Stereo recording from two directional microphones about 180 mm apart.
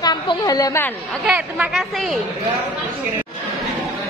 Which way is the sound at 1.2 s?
5° right (ahead or behind).